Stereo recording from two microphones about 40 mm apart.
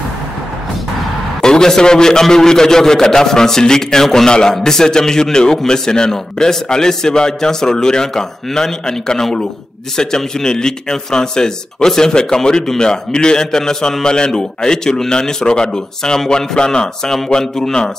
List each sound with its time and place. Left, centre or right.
1.4 s a man's voice: centre